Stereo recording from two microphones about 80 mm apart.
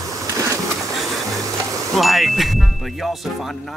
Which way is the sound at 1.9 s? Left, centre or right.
Centre.